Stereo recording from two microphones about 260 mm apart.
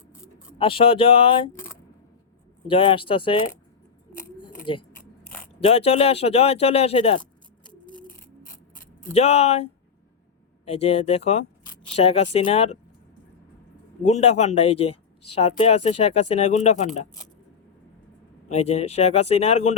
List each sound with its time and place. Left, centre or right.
0.6 s speech: left
2.6 s speech: left
4.6 s speech: centre
7.6 s a sound: centre
9.1 s speech: left
10.7 s speech: left
14.0 s speech: left
18.4 s speech: left